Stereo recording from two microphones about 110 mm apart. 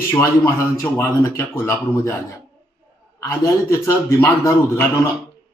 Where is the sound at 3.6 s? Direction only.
25° left (ahead or behind).